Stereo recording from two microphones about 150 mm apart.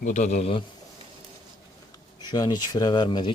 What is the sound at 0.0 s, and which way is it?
Speech, 55° left (ahead or behind).